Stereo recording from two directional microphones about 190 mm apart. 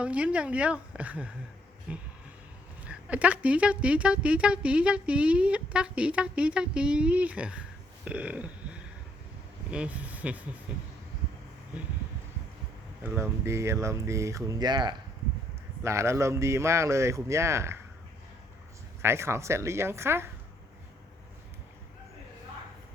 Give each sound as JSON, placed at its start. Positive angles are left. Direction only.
{"t": 0.0, "sound": "speech", "side_deg": -5}
{"t": 9.7, "sound": "speech", "side_deg": -5}
{"t": 13.0, "sound": "speech", "side_deg": -10}
{"t": 19.0, "sound": "speech", "side_deg": -15}